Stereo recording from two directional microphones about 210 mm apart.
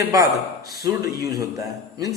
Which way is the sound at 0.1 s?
15° right (ahead or behind).